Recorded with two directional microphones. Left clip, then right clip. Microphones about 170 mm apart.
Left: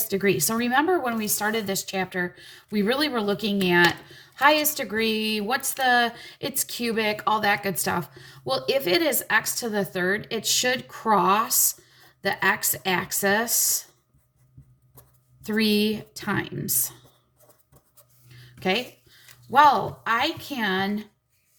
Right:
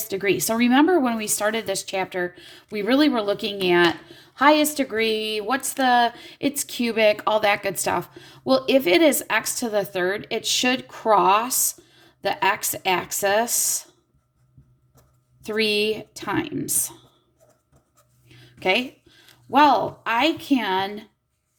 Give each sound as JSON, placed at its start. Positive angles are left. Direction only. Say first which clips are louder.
{"t": 0.0, "sound": "speech", "louder": "right 1 dB", "side_deg": -30}
{"t": 15.4, "sound": "speech", "louder": "right 3 dB", "side_deg": -30}
{"t": 18.3, "sound": "speech", "louder": "right 4 dB", "side_deg": -30}